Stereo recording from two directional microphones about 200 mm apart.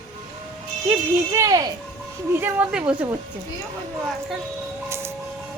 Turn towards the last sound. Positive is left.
turn(degrees=-10)  # may be behind; listen again after turning